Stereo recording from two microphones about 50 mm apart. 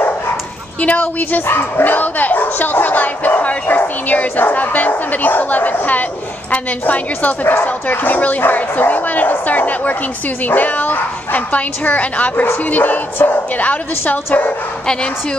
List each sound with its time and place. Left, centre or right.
0.7 s speech: left